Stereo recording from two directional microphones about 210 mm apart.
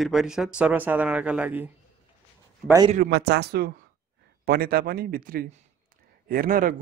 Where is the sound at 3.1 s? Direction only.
50° right (ahead or behind).